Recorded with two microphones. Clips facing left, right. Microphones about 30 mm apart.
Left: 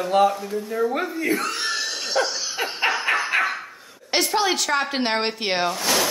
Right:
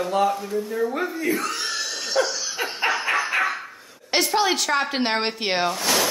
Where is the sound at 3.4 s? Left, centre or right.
Centre.